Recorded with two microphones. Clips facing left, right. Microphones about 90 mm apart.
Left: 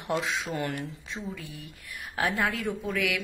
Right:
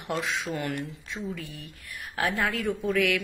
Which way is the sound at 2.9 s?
5° left (ahead or behind).